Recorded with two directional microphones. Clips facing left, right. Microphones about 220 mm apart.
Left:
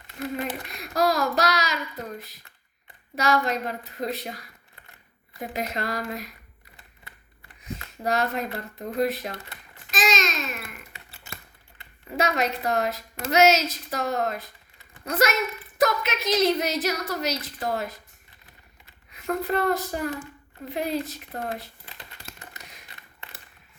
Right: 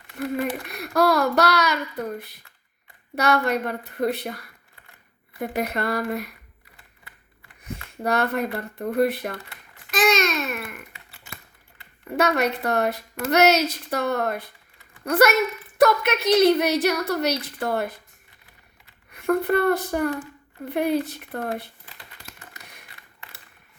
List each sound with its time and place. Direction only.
0.3 s a woman's voice: 60° right (ahead or behind)
7.6 s speech: 60° right (ahead or behind)
9.9 s a sound: 60° right (ahead or behind)
12.0 s a woman's voice: 60° right (ahead or behind)
19.1 s a woman's voice: 55° right (ahead or behind)